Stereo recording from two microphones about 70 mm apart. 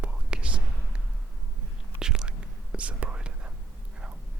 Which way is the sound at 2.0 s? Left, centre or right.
Centre.